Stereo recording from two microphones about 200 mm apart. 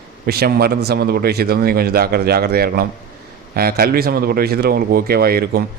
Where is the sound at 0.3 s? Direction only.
50° right (ahead or behind).